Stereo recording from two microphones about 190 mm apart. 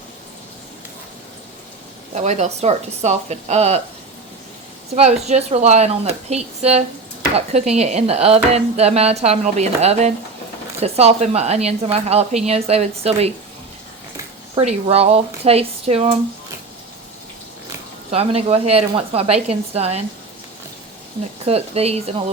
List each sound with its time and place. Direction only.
2.1 s speech: 35° right (ahead or behind)
5.2 s speech: 35° right (ahead or behind)
14.6 s speech: 35° right (ahead or behind)
18.1 s speech: 30° right (ahead or behind)
21.4 s speech: 30° right (ahead or behind)